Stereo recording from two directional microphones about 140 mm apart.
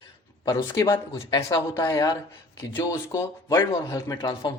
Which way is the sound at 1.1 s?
30° left (ahead or behind).